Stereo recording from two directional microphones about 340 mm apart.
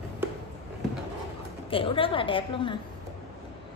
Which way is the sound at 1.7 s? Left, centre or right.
Centre.